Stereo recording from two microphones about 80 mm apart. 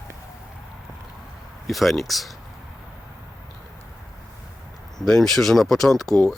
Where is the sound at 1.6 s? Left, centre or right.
Centre.